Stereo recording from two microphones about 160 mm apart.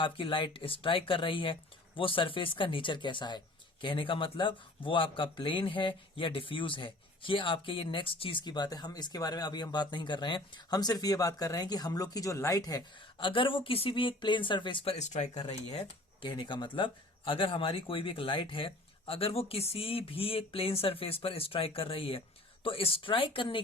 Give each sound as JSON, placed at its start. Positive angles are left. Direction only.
{"t": 0.0, "sound": "speech", "side_deg": 30}
{"t": 14.9, "sound": "speech", "side_deg": 45}
{"t": 16.2, "sound": "speech", "side_deg": 30}